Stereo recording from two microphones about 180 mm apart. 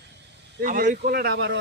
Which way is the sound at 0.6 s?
45° right (ahead or behind).